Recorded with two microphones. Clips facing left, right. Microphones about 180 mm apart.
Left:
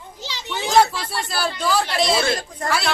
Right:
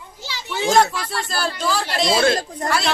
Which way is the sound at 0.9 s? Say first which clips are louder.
Right 1 dB; 25° left (ahead or behind).